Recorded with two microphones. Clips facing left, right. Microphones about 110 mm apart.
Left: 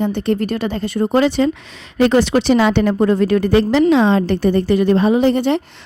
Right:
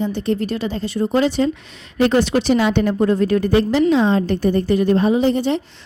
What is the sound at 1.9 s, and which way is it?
A woman's voice, 90° left.